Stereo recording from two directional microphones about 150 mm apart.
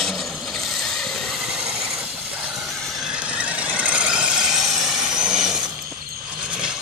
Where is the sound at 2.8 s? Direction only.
5° right (ahead or behind).